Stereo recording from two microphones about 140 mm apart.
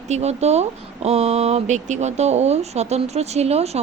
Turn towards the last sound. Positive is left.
turn(degrees=-50)  # may be behind; listen again after turning